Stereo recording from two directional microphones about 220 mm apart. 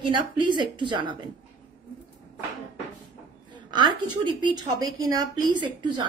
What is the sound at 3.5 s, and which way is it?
A woman's voice, 20° right (ahead or behind).